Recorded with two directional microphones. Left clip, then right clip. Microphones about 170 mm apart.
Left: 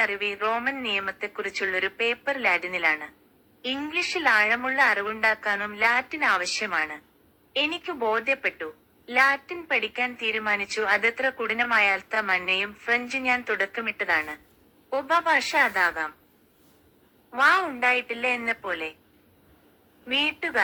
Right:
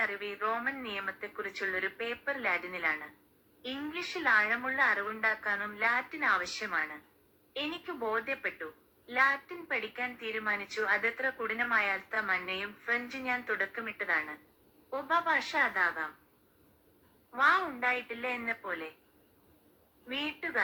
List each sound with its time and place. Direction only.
0.0 s a woman's voice: 35° left (ahead or behind)
17.3 s a woman's voice: 35° left (ahead or behind)
20.1 s a woman's voice: 35° left (ahead or behind)